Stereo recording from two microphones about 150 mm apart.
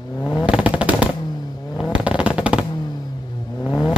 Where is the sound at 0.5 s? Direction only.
10° right (ahead or behind).